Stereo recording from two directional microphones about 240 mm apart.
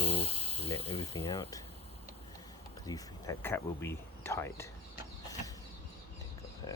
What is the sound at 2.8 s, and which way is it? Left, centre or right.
Speech, centre.